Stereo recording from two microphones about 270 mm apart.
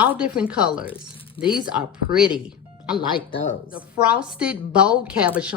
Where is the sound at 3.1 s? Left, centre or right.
Centre.